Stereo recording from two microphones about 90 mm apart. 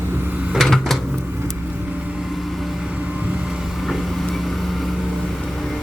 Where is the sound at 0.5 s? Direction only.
Centre (ahead or behind).